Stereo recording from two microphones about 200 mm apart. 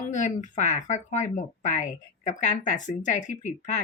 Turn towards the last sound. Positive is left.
turn(degrees=35)  # may be behind; listen again after turning